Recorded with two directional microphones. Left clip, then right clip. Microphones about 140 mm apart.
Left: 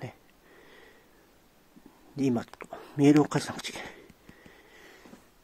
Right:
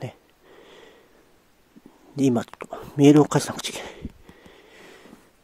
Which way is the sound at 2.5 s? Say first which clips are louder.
Right 7 dB; 35° right (ahead or behind).